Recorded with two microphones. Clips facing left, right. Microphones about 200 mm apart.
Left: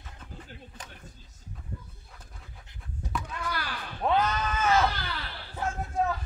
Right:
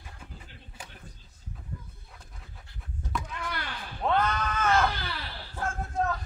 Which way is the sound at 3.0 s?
5° left (ahead or behind).